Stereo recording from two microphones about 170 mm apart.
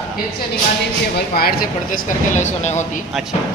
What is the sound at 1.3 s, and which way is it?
Speech, 60° left (ahead or behind).